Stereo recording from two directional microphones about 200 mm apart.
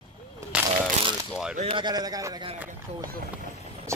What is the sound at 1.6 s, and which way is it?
Speech, 25° right (ahead or behind).